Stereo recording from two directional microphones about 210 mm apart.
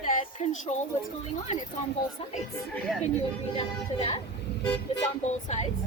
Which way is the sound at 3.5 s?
30° left (ahead or behind).